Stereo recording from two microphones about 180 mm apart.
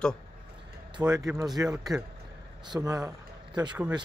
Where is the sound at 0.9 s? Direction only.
20° right (ahead or behind).